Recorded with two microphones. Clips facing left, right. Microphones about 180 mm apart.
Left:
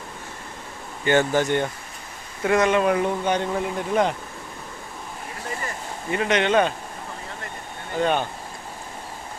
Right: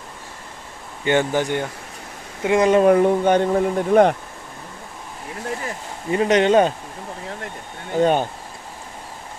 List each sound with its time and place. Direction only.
1.0 s speech: 15° right (ahead or behind)
2.6 s speech: 40° right (ahead or behind)
6.1 s speech: 35° right (ahead or behind)
8.0 s speech: 40° right (ahead or behind)